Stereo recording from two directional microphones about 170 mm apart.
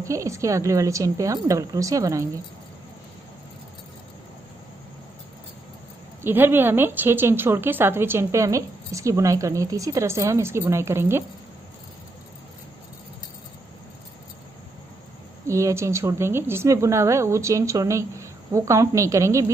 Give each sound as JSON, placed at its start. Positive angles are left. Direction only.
{"t": 0.0, "sound": "a woman's voice", "side_deg": -15}
{"t": 6.2, "sound": "a woman's voice", "side_deg": -10}
{"t": 15.4, "sound": "a woman's voice", "side_deg": -15}